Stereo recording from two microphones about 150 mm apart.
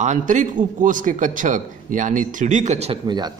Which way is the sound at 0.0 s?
55° right (ahead or behind).